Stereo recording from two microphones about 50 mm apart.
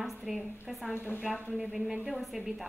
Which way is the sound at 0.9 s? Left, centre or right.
Left.